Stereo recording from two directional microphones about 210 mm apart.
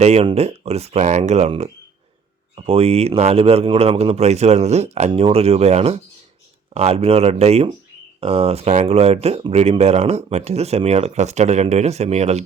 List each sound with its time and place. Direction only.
0.0 s speech: 30° right (ahead or behind)